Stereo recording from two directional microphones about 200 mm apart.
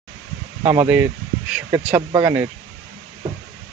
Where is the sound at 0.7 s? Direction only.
10° right (ahead or behind).